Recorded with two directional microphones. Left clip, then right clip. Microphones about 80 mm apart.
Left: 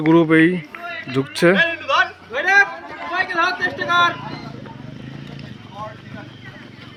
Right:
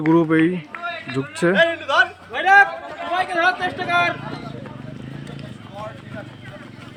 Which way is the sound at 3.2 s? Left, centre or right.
Centre.